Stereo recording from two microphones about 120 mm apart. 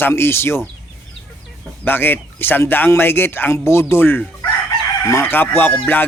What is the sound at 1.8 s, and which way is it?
Speech, 20° left (ahead or behind).